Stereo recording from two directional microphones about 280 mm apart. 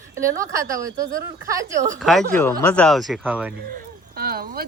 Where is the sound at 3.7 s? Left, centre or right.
Right.